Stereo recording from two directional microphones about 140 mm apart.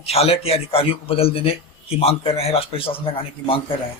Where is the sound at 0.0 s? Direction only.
45° left (ahead or behind).